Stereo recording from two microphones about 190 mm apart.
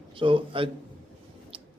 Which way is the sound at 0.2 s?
25° right (ahead or behind).